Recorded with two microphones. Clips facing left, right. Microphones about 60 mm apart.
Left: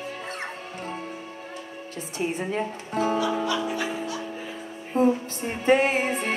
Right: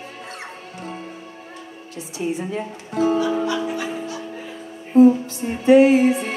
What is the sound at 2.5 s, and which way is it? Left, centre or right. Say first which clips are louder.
Music: even; left.